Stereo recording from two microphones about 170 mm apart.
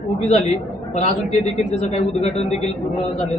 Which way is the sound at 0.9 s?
40° left (ahead or behind).